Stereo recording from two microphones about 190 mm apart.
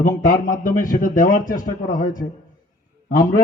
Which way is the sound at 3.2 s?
40° left (ahead or behind).